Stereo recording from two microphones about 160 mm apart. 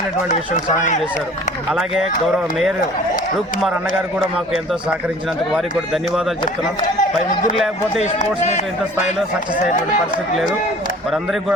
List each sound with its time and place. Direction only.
0.3 s speech: 50° left (ahead or behind)
2.3 s a man's voice: centre (ahead or behind)
6.8 s speech: 50° left (ahead or behind)
7.5 s a man's voice: centre (ahead or behind)
8.0 s speech: 45° left (ahead or behind)
9.6 s speech: 50° left (ahead or behind)
11.1 s a man's voice: centre (ahead or behind)